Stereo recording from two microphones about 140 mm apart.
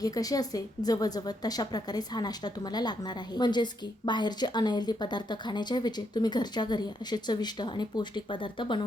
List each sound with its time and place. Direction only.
0.0 s a woman's voice: 25° left (ahead or behind)